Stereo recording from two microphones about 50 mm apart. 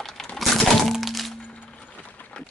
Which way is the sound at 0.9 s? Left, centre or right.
Centre.